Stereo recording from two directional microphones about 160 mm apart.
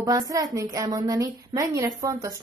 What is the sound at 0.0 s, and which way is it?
A woman's voice, 20° right (ahead or behind).